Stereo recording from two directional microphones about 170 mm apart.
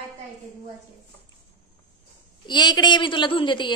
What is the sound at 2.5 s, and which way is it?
A woman's voice, 25° left (ahead or behind).